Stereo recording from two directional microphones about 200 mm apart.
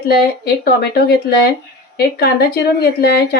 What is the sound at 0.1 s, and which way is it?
Speech, 50° left (ahead or behind).